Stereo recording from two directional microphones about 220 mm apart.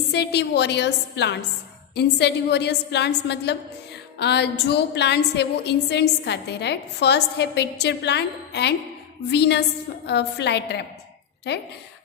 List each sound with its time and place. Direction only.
0.1 s a woman's voice: 50° left (ahead or behind)